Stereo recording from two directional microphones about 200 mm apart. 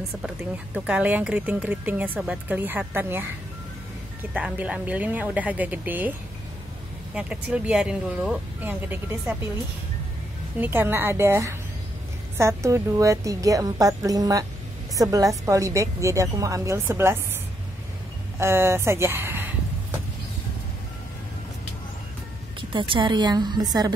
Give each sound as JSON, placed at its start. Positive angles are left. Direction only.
{"t": 0.7, "sound": "speech", "side_deg": -5}
{"t": 4.3, "sound": "speech", "side_deg": -5}
{"t": 7.2, "sound": "speech", "side_deg": -5}
{"t": 10.6, "sound": "speech", "side_deg": -10}
{"t": 18.4, "sound": "speech", "side_deg": -15}
{"t": 22.6, "sound": "a woman's voice", "side_deg": -25}